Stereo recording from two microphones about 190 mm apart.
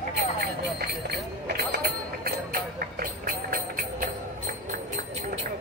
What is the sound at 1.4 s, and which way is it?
Vehicle, 60° right (ahead or behind).